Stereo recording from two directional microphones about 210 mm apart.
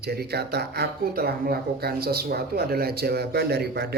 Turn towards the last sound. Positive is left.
turn(degrees=-50)  # may be behind; listen again after turning